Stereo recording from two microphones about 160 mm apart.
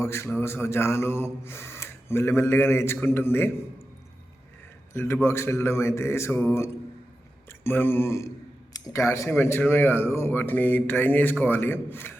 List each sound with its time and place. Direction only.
0.0 s speech: 15° left (ahead or behind)
4.9 s speech: 15° left (ahead or behind)